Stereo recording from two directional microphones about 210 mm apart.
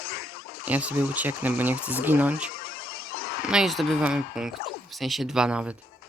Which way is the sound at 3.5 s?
Centre (ahead or behind).